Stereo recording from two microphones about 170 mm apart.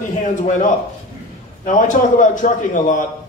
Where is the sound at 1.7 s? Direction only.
50° left (ahead or behind).